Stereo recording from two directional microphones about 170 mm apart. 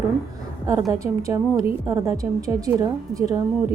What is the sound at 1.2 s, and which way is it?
A woman's voice, 20° right (ahead or behind).